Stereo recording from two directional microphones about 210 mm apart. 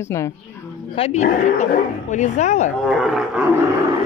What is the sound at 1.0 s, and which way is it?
Speech, 30° left (ahead or behind).